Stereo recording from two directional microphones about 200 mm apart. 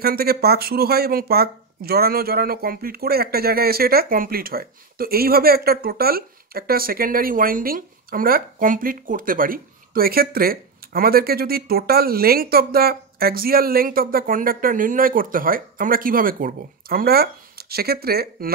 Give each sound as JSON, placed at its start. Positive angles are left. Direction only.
{"t": 0.0, "sound": "speech", "side_deg": -50}